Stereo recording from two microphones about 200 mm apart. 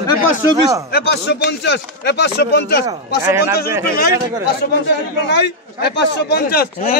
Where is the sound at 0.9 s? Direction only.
60° left (ahead or behind).